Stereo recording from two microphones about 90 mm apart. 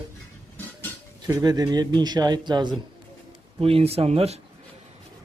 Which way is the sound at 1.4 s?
45° right (ahead or behind).